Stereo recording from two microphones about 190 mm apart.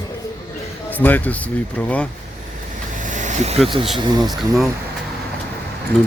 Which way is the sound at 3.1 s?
40° right (ahead or behind).